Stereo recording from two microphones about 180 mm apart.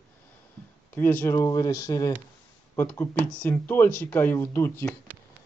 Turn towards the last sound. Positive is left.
turn(degrees=15)  # may be behind; listen again after turning